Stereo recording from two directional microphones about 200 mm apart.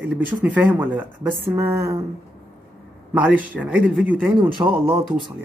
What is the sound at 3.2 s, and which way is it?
Speech, 5° right (ahead or behind).